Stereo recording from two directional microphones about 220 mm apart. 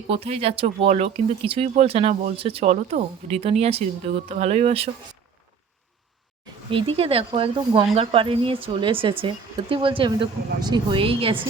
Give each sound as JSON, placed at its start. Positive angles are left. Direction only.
{"t": 0.1, "sound": "speech", "side_deg": -25}
{"t": 6.7, "sound": "speech", "side_deg": -25}